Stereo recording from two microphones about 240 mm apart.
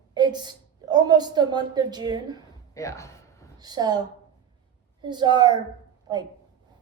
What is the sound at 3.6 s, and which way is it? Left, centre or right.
Speech, centre.